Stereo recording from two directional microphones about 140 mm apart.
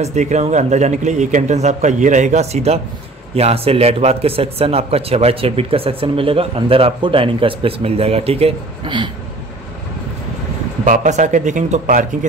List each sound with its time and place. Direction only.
0.0 s speech: 55° right (ahead or behind); by 9.1 s 35° right (ahead or behind)
10.9 s speech: 60° right (ahead or behind)